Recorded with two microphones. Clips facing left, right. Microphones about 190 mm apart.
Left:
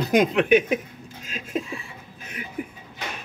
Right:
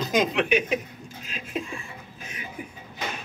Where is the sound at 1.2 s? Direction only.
45° left (ahead or behind).